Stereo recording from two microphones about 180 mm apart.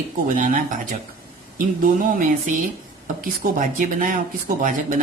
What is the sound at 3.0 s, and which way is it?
Speech, 45° right (ahead or behind).